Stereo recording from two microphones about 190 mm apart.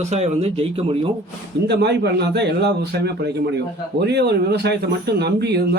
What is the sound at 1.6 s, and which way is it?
Speech, 65° right (ahead or behind).